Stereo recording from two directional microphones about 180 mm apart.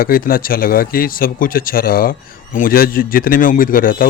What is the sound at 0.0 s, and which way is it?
A man's voice, 55° left (ahead or behind).